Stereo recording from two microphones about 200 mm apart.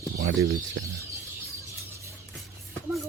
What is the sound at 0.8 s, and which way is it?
Speech, 75° right (ahead or behind).